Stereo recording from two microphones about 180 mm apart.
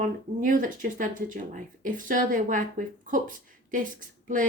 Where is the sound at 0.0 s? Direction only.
45° right (ahead or behind).